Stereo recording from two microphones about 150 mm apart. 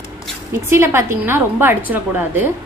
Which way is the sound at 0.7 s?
15° right (ahead or behind).